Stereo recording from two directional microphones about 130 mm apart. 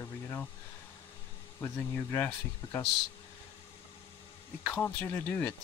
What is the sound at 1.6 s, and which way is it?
Speech, 15° left (ahead or behind).